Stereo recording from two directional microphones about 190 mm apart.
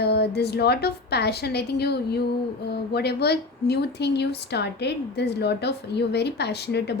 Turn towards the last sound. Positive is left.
turn(degrees=60)  # may be behind; listen again after turning